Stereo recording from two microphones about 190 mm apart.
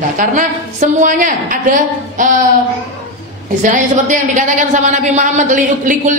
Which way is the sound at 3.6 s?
40° right (ahead or behind).